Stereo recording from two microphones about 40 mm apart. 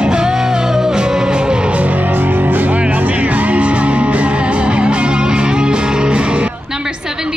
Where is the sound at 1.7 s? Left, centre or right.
Right.